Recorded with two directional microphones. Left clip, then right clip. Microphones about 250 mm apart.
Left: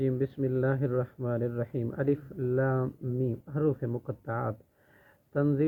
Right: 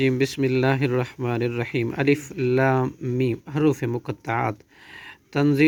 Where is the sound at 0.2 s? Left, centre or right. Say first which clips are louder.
Right 8 dB; right.